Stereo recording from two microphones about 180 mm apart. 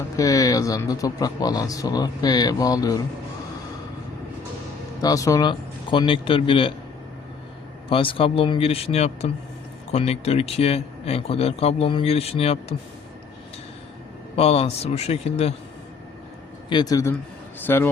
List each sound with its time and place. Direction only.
0.2 s speech: 20° left (ahead or behind)
5.0 s speech: 20° left (ahead or behind)
7.9 s speech: 30° left (ahead or behind)
14.3 s speech: 35° left (ahead or behind)
16.6 s speech: 25° left (ahead or behind)